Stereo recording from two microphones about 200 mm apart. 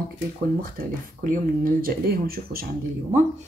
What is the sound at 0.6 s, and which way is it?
Speech, 45° right (ahead or behind).